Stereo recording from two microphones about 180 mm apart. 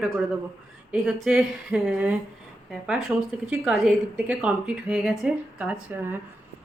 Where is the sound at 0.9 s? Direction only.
5° right (ahead or behind).